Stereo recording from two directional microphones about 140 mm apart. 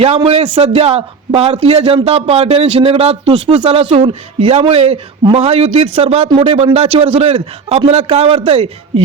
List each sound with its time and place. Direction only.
0.0 s a man's voice: 45° right (ahead or behind)